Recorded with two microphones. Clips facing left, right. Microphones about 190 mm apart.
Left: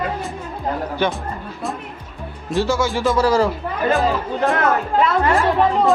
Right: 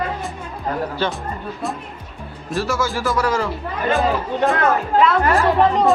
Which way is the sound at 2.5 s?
20° left (ahead or behind).